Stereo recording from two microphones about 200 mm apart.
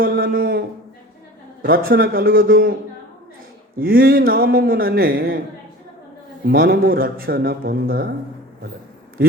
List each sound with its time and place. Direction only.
0.0 s a sound: 45° right (ahead or behind)
1.6 s a man's voice: 45° right (ahead or behind)
3.8 s a man's voice: 45° right (ahead or behind)
6.4 s a man's voice: 50° right (ahead or behind)